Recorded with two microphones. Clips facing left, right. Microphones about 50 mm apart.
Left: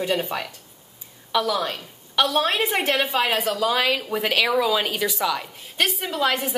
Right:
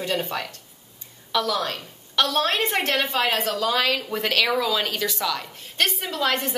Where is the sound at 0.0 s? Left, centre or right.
Centre.